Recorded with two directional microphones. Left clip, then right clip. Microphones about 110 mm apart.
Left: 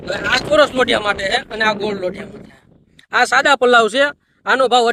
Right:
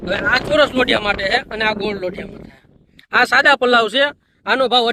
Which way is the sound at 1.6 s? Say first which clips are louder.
Left 2 dB; 80° left.